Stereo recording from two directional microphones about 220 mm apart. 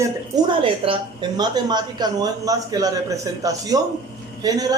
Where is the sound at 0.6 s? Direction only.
20° right (ahead or behind).